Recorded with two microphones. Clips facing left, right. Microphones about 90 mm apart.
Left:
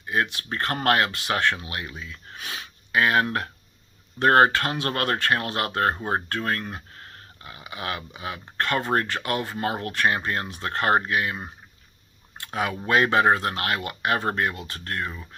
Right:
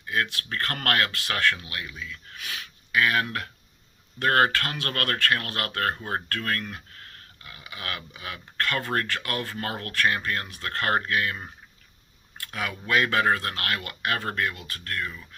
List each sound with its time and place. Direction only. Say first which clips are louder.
0.0 s speech: left 2 dB; 25° left (ahead or behind)